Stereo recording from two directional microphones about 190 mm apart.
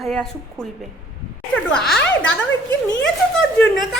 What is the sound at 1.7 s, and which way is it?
Speech, 5° left (ahead or behind).